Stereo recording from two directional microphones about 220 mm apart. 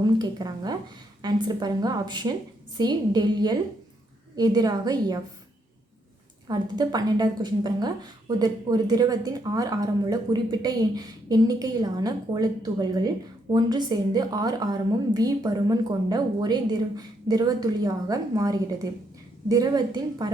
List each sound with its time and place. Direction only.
0.0 s a woman's voice: 20° right (ahead or behind)
6.5 s a woman's voice: 20° right (ahead or behind)